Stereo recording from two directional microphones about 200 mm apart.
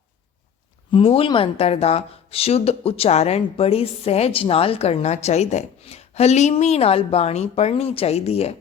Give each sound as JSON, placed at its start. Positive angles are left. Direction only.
{"t": 0.9, "sound": "speech", "side_deg": 25}